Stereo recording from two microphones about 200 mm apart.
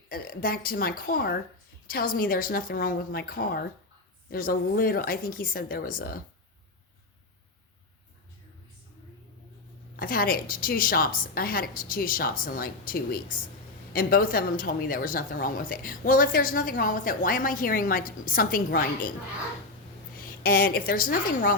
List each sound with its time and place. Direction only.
0.1 s a woman's voice: 45° left (ahead or behind)
10.0 s a woman's voice: 45° left (ahead or behind)
20.1 s a woman's voice: 45° left (ahead or behind)